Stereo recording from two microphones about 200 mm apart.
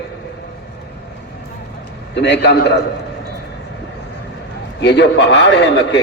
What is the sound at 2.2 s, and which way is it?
Speech, 60° left (ahead or behind).